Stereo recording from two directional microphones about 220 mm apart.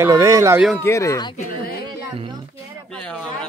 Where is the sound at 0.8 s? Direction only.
15° left (ahead or behind).